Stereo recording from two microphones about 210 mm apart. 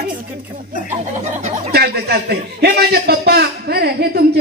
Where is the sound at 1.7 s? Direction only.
50° right (ahead or behind).